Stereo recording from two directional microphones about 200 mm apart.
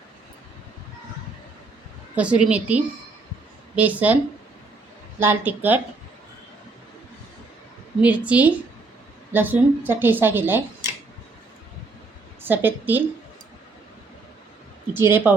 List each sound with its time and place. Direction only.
2.1 s a woman's voice: 5° right (ahead or behind)
5.2 s a woman's voice: 10° right (ahead or behind)
8.0 s a woman's voice: 5° right (ahead or behind)
12.5 s a woman's voice: 10° right (ahead or behind)
14.9 s a woman's voice: 10° right (ahead or behind)